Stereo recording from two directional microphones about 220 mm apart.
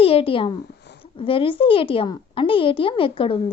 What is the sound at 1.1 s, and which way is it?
A woman's voice, 25° left (ahead or behind).